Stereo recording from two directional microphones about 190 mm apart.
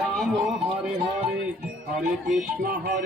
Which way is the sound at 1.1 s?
25° right (ahead or behind).